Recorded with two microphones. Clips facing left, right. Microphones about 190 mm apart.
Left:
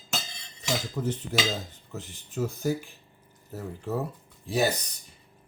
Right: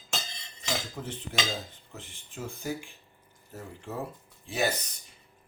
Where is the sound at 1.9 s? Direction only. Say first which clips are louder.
Left 9 dB; 40° left (ahead or behind).